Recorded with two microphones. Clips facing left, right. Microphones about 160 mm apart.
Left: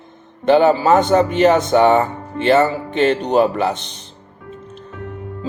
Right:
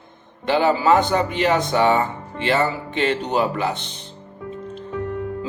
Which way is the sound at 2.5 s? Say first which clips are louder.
Left 6 dB; 45° left (ahead or behind).